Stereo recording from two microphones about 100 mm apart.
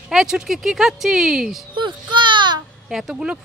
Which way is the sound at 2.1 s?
50° right (ahead or behind).